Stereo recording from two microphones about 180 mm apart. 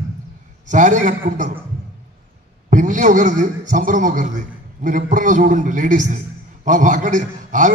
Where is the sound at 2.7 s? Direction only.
45° right (ahead or behind).